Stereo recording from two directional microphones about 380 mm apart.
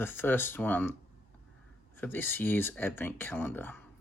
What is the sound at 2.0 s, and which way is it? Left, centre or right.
Speech, centre.